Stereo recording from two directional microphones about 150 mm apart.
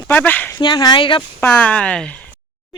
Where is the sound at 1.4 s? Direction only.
10° left (ahead or behind).